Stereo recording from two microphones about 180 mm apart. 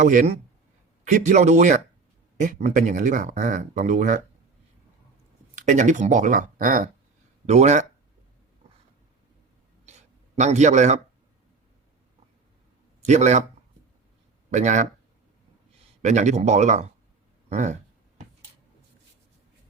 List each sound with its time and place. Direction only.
0.0 s speech: 45° right (ahead or behind)
5.5 s speech: 45° right (ahead or behind)
9.8 s a sound: 40° right (ahead or behind)
13.0 s a man's voice: 40° right (ahead or behind)
14.5 s speech: 40° right (ahead or behind)
16.0 s speech: 40° right (ahead or behind)